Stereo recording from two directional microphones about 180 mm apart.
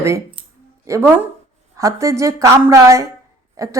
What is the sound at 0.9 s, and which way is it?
Speech, 15° right (ahead or behind).